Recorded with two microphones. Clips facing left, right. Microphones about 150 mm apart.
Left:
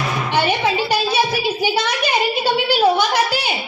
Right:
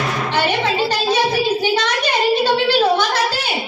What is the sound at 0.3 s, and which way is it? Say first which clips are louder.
Music: left 1 dB; 10° left (ahead or behind).